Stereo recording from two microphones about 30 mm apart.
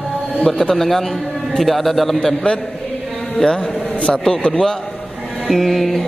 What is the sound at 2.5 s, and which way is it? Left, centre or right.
Speech, left.